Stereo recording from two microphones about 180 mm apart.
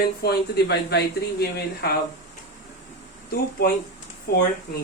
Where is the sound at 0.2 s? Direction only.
60° left (ahead or behind).